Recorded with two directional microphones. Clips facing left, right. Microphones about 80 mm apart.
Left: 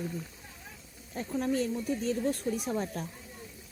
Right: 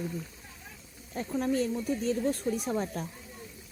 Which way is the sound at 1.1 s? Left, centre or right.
Right.